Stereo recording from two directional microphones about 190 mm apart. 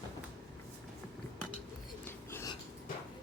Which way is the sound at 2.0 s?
15° left (ahead or behind).